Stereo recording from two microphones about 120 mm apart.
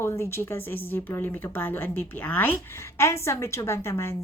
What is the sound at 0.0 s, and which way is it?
A woman's voice, 20° left (ahead or behind).